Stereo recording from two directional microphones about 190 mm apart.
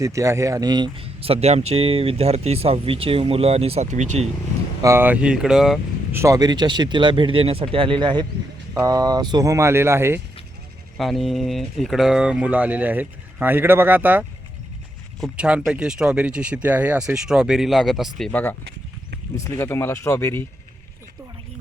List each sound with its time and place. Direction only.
0.0 s speech: 15° right (ahead or behind); by 4.3 s 40° right (ahead or behind)
4.8 s speech: 15° right (ahead or behind)
6.1 s speech: 15° right (ahead or behind)
10.9 s speech: centre (ahead or behind)